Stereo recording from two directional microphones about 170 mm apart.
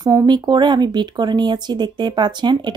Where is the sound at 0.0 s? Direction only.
20° right (ahead or behind).